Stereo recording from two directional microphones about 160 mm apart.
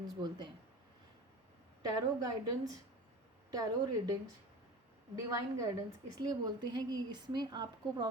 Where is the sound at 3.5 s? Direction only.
25° right (ahead or behind).